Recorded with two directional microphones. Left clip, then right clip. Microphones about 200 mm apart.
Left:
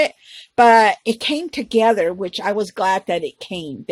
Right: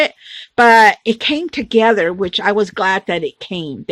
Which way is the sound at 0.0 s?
25° right (ahead or behind).